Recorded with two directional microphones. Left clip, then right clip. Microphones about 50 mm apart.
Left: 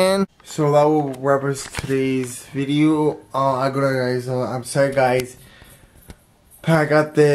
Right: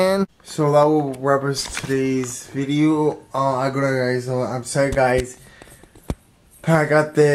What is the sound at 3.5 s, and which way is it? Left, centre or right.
Speech, centre.